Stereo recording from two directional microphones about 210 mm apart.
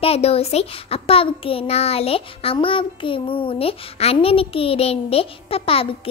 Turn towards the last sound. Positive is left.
turn(degrees=25)  # may be behind; listen again after turning